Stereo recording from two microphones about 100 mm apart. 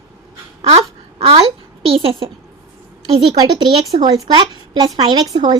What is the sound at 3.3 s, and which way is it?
A child's voice, 45° right (ahead or behind).